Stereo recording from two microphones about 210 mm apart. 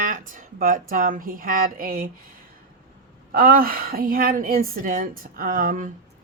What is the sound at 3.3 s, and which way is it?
A woman's voice, 45° right (ahead or behind).